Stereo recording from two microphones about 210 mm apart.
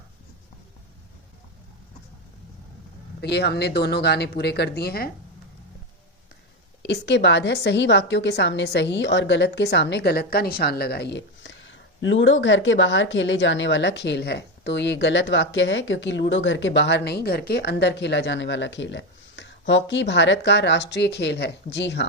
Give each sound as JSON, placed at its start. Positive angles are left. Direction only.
{"t": 3.2, "sound": "speech", "side_deg": 50}
{"t": 6.8, "sound": "a woman's voice", "side_deg": 55}